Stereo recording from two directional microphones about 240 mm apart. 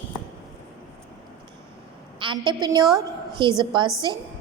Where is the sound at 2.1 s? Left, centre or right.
Centre.